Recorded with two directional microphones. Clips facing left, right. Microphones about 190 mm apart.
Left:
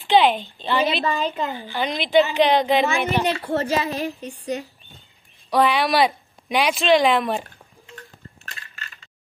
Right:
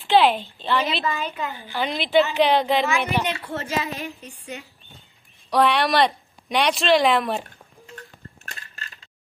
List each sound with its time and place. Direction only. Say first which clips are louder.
0.0 s speech: left 1 dB; centre (ahead or behind)
1.0 s a woman's voice: left 4 dB; 35° left (ahead or behind)
1.7 s speech: even; centre (ahead or behind)
3.3 s a woman's voice: left 6 dB; 35° left (ahead or behind)
5.5 s speech: left 1 dB; centre (ahead or behind)
8.5 s a sound: even; 40° right (ahead or behind)